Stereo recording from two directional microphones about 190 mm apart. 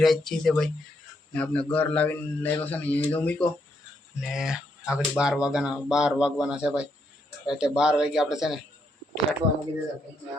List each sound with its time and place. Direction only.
0.0 s a man's voice: centre (ahead or behind)
4.2 s speech: 5° right (ahead or behind)
9.4 s speech: 30° right (ahead or behind)